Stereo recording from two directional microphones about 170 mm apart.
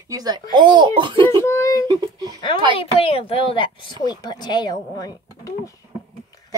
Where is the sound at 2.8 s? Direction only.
35° left (ahead or behind).